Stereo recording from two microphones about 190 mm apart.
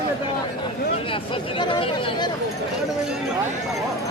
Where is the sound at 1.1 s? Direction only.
25° left (ahead or behind).